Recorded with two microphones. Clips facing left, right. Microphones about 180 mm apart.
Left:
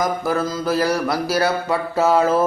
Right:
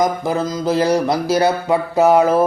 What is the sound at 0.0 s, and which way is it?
Mantra, 20° right (ahead or behind).